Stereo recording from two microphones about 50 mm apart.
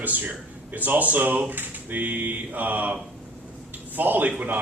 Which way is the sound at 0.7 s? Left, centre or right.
Right.